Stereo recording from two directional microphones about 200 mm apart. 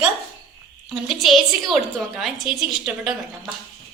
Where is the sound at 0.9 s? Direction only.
Centre (ahead or behind).